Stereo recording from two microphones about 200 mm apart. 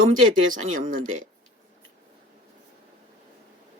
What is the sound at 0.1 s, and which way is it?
Speech, 40° right (ahead or behind).